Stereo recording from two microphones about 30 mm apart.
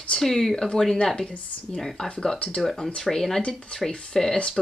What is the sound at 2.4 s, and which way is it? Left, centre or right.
Speech, left.